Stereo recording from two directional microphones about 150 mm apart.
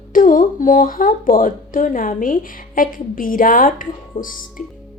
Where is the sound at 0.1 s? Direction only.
65° left (ahead or behind).